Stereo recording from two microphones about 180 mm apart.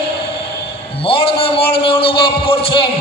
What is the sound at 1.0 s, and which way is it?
A man's voice, 30° left (ahead or behind).